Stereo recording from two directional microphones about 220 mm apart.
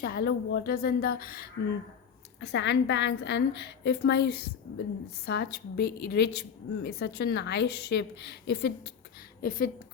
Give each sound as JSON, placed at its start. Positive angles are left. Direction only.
{"t": 0.0, "sound": "a woman's voice", "side_deg": 45}
{"t": 9.4, "sound": "a woman's voice", "side_deg": 40}